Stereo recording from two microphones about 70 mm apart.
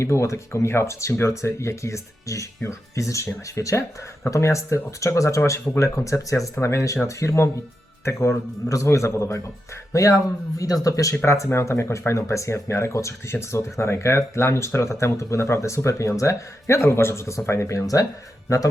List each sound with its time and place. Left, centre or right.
0.0 s speech: left
11.5 s speech: left